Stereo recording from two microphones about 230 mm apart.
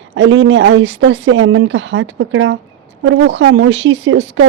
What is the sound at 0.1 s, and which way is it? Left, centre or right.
Speech, right.